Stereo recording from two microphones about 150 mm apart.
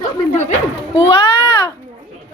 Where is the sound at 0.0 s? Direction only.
50° left (ahead or behind).